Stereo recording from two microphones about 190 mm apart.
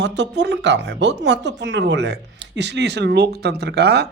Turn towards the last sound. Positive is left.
turn(degrees=-60)  # may be behind; listen again after turning